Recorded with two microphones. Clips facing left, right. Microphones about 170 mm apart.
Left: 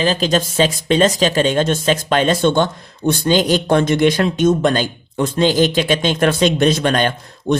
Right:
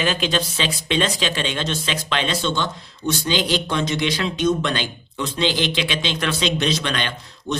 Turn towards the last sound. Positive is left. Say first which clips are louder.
# left 8 dB
turn(degrees=50)  # may be behind; listen again after turning